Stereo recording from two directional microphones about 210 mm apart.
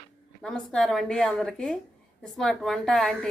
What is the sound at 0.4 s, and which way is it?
A woman's voice, 5° left (ahead or behind).